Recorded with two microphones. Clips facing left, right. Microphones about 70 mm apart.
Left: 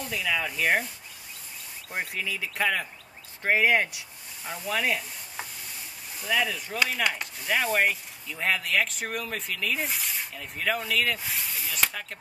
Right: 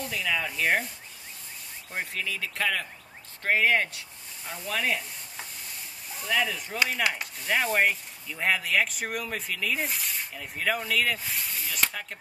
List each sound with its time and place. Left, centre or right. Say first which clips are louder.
0.0 s speech: left 1 dB; centre
1.9 s speech: left 1 dB; centre
6.2 s speech: left 1 dB; centre